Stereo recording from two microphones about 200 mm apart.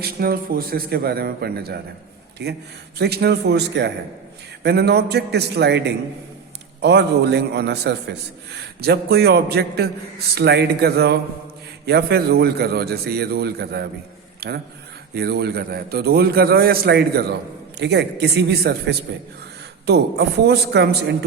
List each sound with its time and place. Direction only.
0.0 s a man's voice: 50° right (ahead or behind)